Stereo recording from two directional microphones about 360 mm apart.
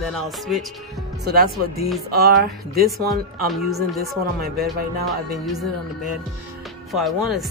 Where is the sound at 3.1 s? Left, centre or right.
Centre.